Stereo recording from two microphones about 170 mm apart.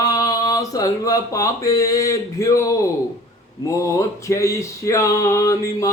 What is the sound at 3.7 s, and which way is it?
Male singing, 20° left (ahead or behind).